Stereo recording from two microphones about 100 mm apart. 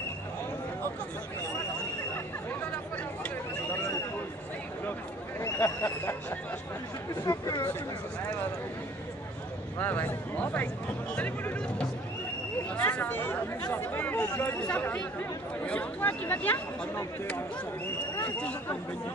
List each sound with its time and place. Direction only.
5.4 s speech: 25° left (ahead or behind)
7.2 s speech: 35° left (ahead or behind)
9.8 s a man's voice: 20° left (ahead or behind)
18.2 s speech: 15° left (ahead or behind)